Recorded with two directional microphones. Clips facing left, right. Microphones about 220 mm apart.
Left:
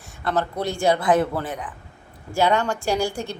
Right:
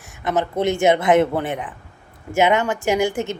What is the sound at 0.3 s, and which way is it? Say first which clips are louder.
Speech: right 4 dB; 20° right (ahead or behind).